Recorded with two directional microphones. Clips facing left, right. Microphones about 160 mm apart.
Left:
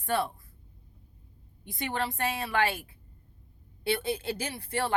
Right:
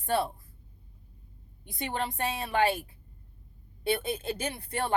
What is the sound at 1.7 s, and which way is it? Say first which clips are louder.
Speech: left 1 dB; 20° right (ahead or behind).